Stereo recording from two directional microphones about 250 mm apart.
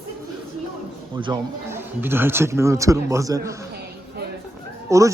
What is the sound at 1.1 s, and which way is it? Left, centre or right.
A man's voice, centre.